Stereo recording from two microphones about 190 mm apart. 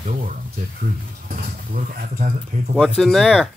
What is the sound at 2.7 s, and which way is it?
Speech, centre (ahead or behind).